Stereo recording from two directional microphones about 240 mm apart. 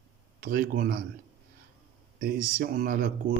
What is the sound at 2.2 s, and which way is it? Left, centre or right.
Speech, right.